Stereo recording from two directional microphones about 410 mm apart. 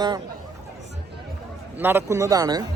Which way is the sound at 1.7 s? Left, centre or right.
Centre.